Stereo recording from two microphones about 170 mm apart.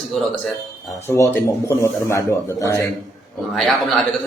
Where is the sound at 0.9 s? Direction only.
20° left (ahead or behind).